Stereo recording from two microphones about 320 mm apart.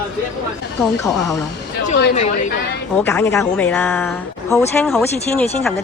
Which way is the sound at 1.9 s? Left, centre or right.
Left.